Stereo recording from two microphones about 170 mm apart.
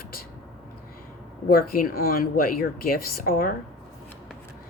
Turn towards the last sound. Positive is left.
turn(degrees=60)  # may be behind; listen again after turning